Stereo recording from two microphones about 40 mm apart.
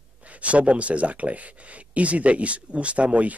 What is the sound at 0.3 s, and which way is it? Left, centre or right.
Speech, right.